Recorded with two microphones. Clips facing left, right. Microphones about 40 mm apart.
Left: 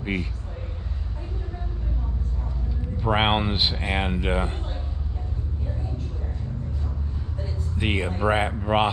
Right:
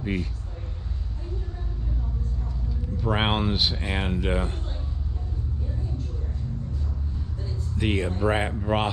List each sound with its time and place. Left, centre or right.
0.0 s speech: left
3.0 s speech: centre
7.7 s speech: centre